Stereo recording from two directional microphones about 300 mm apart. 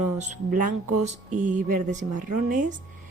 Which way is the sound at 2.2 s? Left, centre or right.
Right.